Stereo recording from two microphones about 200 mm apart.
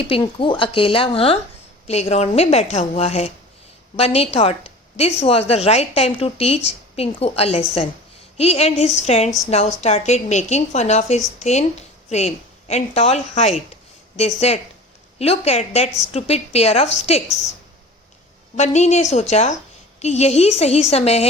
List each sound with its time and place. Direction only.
0.0 s a woman's voice: 25° left (ahead or behind)
18.5 s a woman's voice: 35° left (ahead or behind)